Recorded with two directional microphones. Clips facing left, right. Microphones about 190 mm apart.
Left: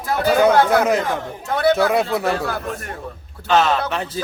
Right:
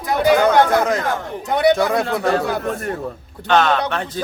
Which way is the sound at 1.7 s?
5° left (ahead or behind).